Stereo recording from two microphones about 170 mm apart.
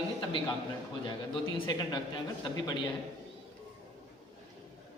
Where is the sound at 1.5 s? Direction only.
25° left (ahead or behind).